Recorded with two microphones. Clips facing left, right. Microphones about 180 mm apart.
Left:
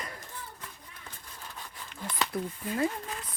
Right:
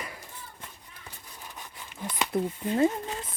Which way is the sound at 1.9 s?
15° right (ahead or behind).